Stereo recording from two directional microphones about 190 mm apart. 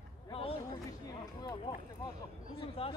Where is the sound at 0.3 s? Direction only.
30° left (ahead or behind).